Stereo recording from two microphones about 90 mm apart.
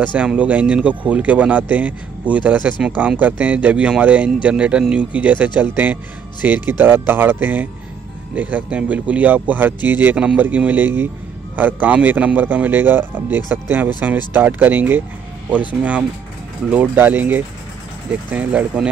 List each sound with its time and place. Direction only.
0.0 s a man's voice: 15° right (ahead or behind)